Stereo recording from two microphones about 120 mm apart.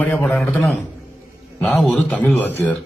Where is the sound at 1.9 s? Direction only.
10° left (ahead or behind).